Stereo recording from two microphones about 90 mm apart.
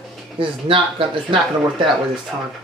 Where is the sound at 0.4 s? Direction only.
70° right (ahead or behind).